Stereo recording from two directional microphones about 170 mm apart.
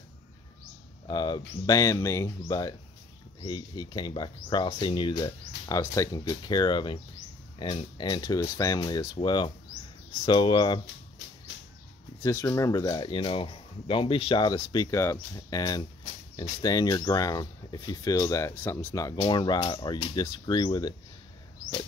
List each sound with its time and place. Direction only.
1.0 s speech: 25° left (ahead or behind)
12.2 s speech: 15° left (ahead or behind)
19.1 s speech: 25° left (ahead or behind)